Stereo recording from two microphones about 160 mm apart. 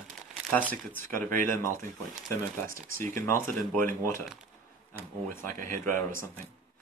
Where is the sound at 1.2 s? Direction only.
60° right (ahead or behind).